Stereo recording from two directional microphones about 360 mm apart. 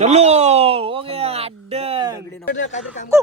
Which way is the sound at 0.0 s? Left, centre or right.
Centre.